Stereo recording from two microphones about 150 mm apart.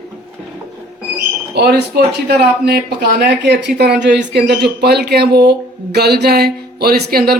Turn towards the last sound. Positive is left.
turn(degrees=-90)